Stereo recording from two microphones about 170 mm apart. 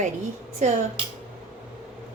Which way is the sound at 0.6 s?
45° right (ahead or behind).